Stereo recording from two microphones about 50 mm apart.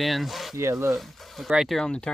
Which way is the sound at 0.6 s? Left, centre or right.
Right.